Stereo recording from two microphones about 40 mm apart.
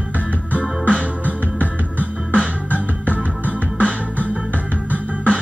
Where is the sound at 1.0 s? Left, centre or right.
Right.